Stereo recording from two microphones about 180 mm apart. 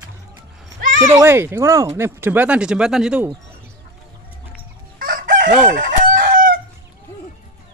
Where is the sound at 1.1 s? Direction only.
15° right (ahead or behind).